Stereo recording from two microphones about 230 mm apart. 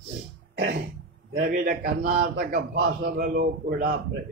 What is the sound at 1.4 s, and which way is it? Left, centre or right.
A man's voice, right.